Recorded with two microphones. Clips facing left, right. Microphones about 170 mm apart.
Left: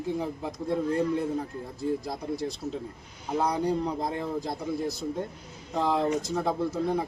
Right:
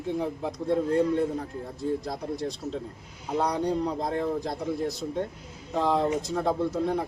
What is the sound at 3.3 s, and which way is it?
Speech, 5° left (ahead or behind).